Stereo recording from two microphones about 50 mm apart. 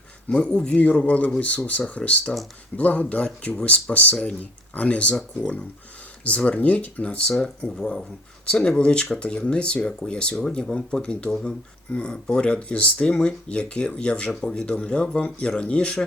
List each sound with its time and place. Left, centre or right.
0.3 s speech: centre
6.2 s speech: left